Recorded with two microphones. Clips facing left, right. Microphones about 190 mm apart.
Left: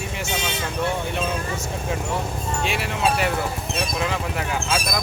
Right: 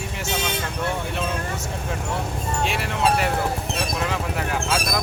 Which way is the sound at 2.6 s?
Centre (ahead or behind).